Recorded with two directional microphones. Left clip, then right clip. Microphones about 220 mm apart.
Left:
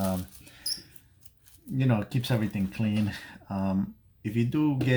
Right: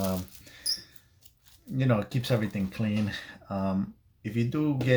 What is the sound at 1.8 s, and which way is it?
Speech, centre (ahead or behind).